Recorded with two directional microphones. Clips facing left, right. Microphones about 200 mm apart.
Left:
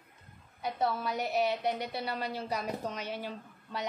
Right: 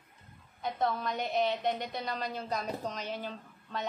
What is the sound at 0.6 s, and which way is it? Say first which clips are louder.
A woman's voice: even; 10° left (ahead or behind).